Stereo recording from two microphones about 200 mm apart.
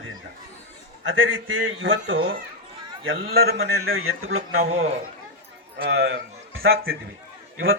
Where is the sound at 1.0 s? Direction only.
75° right (ahead or behind).